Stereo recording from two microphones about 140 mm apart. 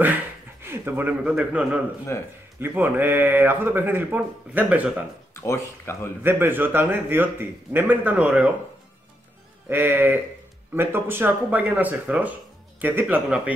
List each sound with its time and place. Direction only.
0.0 s speech: 15° right (ahead or behind)
2.1 s speech: 20° left (ahead or behind)
2.6 s speech: 15° right (ahead or behind)
5.3 s speech: 20° left (ahead or behind)
6.2 s speech: 15° right (ahead or behind)
9.7 s speech: 15° right (ahead or behind)